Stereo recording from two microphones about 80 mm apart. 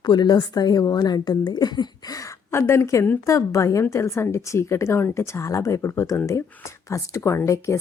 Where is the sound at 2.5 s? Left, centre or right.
Left.